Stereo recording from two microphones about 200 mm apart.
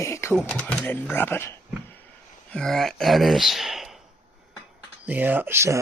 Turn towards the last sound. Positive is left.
turn(degrees=-15)  # may be behind; listen again after turning